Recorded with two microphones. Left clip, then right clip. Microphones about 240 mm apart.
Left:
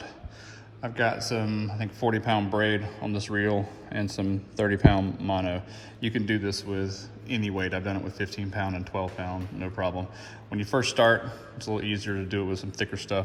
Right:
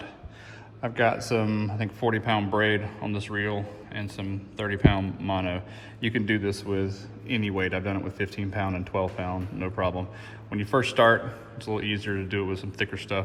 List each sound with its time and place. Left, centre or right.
0.8 s speech: centre